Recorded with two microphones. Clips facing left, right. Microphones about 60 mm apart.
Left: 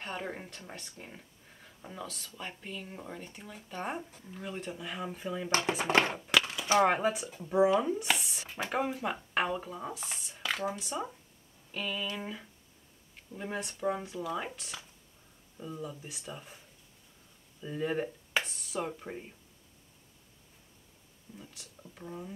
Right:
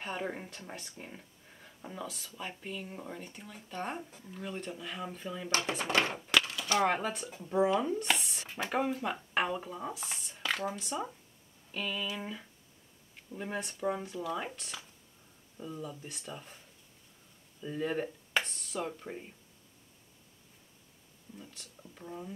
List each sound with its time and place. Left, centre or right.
0.0 s speech: centre
5.9 s a sound: left
6.1 s speech: centre
6.5 s speech: centre
21.4 s speech: centre